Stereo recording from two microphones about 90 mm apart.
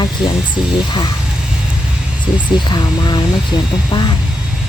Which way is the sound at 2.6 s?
55° left (ahead or behind).